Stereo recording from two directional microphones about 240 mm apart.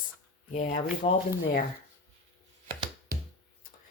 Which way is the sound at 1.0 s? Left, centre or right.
Left.